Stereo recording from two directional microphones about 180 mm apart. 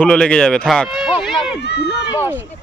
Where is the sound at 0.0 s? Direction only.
5° left (ahead or behind).